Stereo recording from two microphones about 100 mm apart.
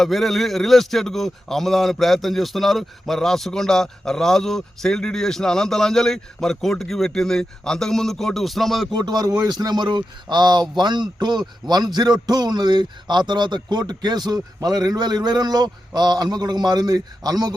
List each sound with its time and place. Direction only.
0.0 s a man's voice: centre (ahead or behind)
8.9 s a man's voice: 45° right (ahead or behind)